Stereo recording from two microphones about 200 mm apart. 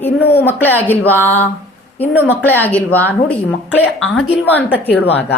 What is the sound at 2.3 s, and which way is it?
Speech, 10° left (ahead or behind).